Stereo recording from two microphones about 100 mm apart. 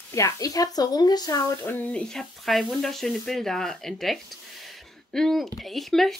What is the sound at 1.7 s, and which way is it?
Speech, 10° left (ahead or behind).